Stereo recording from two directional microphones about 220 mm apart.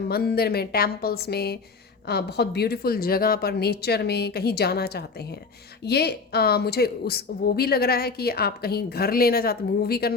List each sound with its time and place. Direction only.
0.1 s a woman's voice: 45° left (ahead or behind)